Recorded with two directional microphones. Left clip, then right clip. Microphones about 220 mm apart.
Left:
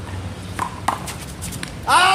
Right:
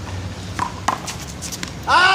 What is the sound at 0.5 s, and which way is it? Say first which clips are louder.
Chopping: right 1 dB; centre (ahead or behind).